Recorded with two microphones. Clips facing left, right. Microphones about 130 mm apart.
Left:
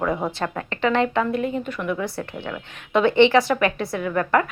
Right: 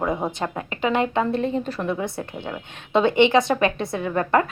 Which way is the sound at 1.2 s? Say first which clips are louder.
Right 1 dB; 30° right (ahead or behind).